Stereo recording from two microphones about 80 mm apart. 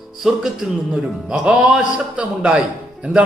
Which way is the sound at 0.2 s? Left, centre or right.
Centre.